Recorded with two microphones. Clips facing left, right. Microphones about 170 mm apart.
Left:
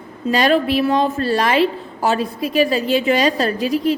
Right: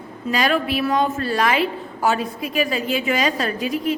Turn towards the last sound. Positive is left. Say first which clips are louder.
# left 4 dB
turn(degrees=35)  # may be behind; listen again after turning